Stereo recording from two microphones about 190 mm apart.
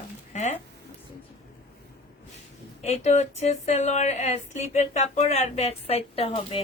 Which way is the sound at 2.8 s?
35° left (ahead or behind).